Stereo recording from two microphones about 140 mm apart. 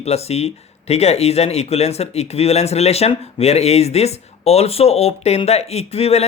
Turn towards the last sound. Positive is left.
turn(degrees=45)  # may be behind; listen again after turning